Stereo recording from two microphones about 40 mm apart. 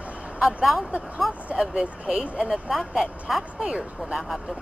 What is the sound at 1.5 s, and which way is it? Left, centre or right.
Speech, right.